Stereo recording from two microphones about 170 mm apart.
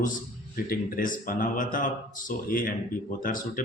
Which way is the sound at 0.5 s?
55° left (ahead or behind).